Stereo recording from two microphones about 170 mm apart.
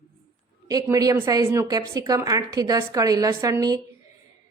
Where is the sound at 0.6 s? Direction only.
20° right (ahead or behind).